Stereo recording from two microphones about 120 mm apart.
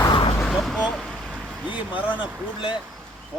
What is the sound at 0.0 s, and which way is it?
Vehicle, 45° left (ahead or behind).